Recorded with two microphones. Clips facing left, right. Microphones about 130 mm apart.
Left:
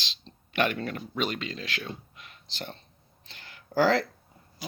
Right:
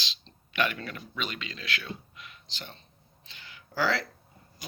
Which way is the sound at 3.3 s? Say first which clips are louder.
Left 7 dB; 50° left (ahead or behind).